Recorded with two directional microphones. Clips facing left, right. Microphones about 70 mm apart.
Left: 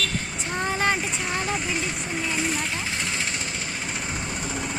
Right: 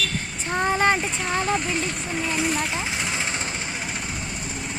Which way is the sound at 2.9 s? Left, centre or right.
Centre.